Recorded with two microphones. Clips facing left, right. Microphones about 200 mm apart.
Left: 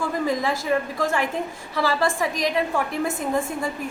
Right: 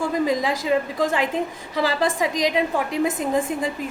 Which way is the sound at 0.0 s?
15° right (ahead or behind).